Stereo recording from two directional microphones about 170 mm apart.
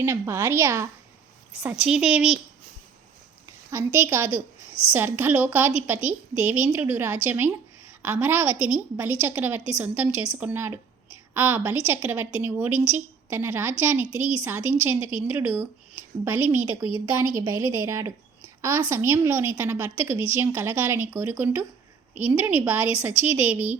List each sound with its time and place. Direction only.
0.0 s a woman's voice: 15° right (ahead or behind)
1.8 s a woman's voice: 5° right (ahead or behind)
3.7 s a woman's voice: 15° right (ahead or behind)
4.7 s a sound: 35° left (ahead or behind)
4.9 s a woman's voice: 15° right (ahead or behind)